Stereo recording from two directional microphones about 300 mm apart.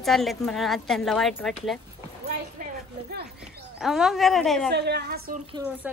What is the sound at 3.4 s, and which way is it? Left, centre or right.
Speech, centre.